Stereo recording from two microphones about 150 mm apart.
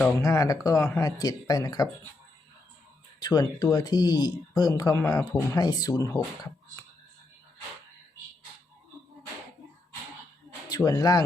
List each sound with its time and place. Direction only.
0.2 s speech: 25° left (ahead or behind)
3.2 s speech: 25° left (ahead or behind)
10.7 s speech: 25° left (ahead or behind)